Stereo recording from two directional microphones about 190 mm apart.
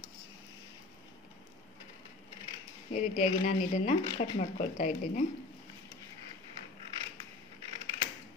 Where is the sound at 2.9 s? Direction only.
40° left (ahead or behind).